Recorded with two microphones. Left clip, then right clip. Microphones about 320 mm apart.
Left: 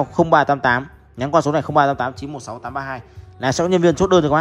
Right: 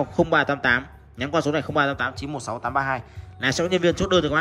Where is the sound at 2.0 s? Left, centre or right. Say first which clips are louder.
Left 3 dB; centre.